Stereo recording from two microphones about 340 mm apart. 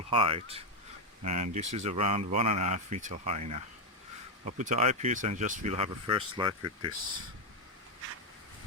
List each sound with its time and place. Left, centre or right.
0.1 s speech: centre